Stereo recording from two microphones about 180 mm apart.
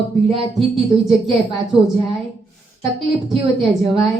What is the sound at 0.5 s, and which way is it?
A woman's voice, centre (ahead or behind).